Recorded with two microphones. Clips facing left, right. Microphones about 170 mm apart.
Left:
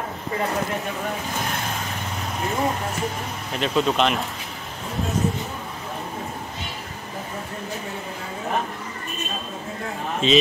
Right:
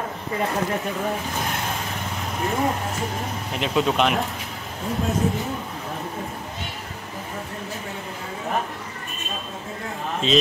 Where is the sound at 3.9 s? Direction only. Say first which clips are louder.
Right 1 dB; 10° right (ahead or behind).